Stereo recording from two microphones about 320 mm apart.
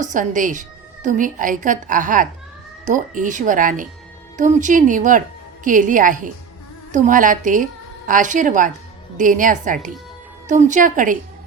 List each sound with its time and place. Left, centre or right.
0.0 s a woman's voice: right